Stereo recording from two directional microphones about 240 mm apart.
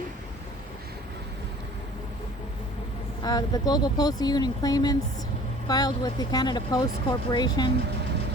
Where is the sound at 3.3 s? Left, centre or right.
Centre.